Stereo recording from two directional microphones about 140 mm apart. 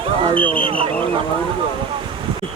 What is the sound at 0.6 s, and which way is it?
Speech, 40° right (ahead or behind).